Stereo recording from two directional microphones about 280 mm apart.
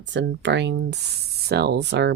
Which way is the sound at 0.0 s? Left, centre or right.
Right.